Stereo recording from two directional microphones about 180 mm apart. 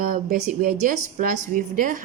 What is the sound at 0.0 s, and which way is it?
A woman's voice, 50° right (ahead or behind).